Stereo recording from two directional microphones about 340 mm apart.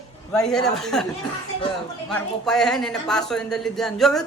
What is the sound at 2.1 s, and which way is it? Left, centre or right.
Speech, centre.